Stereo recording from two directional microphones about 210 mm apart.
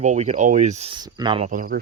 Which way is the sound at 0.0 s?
35° right (ahead or behind).